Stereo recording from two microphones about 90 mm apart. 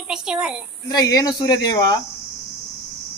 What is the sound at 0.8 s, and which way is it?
A man's voice, 45° left (ahead or behind).